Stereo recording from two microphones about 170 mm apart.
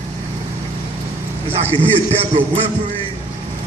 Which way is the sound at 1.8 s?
35° right (ahead or behind).